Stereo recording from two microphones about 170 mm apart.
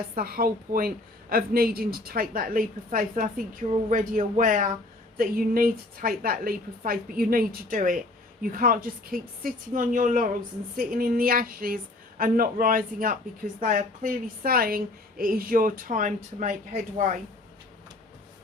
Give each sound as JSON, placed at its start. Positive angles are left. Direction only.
{"t": 0.1, "sound": "a woman's voice", "side_deg": -60}